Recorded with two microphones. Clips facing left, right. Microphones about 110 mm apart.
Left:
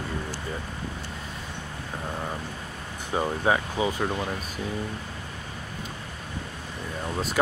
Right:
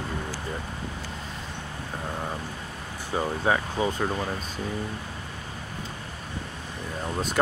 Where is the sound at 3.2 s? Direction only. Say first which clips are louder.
Left 1 dB; 10° left (ahead or behind).